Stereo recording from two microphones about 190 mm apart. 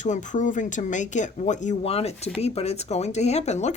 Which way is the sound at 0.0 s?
40° left (ahead or behind).